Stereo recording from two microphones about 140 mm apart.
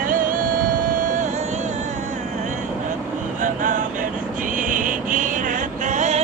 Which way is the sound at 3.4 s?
70° right (ahead or behind).